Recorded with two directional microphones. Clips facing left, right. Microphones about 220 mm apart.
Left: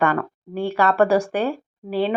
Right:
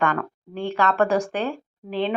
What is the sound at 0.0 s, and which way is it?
A woman's voice, 10° left (ahead or behind).